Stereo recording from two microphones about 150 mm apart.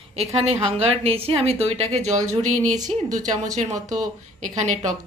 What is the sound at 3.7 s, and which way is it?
Speech, 25° right (ahead or behind).